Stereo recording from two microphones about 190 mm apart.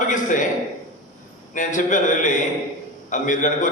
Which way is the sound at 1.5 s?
45° left (ahead or behind).